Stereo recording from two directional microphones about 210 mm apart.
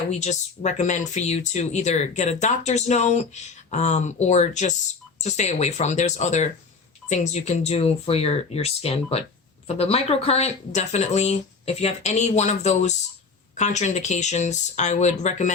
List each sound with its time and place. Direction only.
0.1 s speech: 35° left (ahead or behind)